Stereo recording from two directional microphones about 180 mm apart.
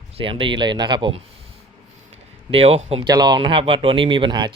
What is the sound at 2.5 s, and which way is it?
Speech, 35° right (ahead or behind).